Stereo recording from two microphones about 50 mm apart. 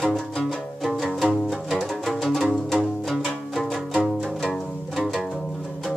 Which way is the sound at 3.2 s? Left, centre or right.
Centre.